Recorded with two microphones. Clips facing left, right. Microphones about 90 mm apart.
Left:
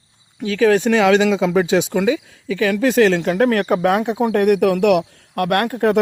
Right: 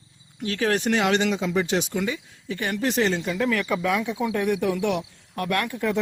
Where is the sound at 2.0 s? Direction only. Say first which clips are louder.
Left 10 dB; 90° left.